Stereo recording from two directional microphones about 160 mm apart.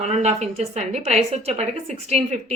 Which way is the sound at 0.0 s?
45° right (ahead or behind).